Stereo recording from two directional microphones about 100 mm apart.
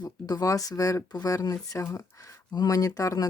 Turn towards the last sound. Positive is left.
turn(degrees=35)  # may be behind; listen again after turning